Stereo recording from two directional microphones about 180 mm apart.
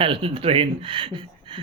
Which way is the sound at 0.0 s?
30° right (ahead or behind).